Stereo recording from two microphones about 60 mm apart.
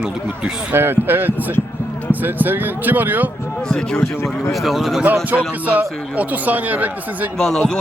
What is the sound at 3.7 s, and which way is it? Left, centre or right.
Speech, centre.